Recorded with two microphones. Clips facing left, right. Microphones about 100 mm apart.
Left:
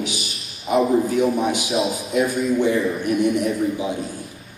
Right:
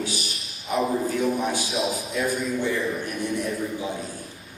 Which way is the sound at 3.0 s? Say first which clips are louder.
Left 8 dB; 15° left (ahead or behind).